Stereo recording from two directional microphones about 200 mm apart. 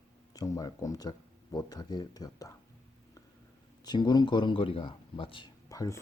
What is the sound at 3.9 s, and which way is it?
Speech, 20° left (ahead or behind).